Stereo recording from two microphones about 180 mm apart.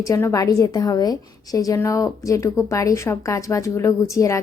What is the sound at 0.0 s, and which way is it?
A woman's voice, 15° left (ahead or behind).